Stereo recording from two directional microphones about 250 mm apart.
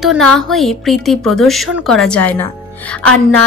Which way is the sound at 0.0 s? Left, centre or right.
Centre.